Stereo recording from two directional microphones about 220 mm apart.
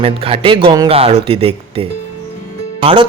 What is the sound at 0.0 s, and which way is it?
Speech, 25° right (ahead or behind).